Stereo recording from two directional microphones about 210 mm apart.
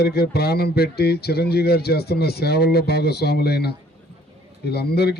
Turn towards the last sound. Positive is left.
turn(degrees=50)  # may be behind; listen again after turning